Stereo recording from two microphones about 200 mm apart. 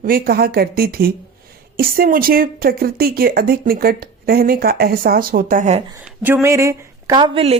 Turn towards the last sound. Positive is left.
turn(degrees=-25)  # may be behind; listen again after turning